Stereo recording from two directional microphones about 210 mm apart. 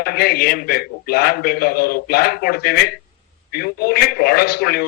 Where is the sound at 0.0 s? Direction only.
45° left (ahead or behind).